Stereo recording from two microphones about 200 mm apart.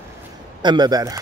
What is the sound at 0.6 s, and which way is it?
Speech, 20° right (ahead or behind).